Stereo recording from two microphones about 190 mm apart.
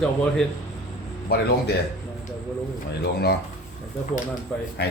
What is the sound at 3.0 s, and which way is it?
Speech, 55° left (ahead or behind).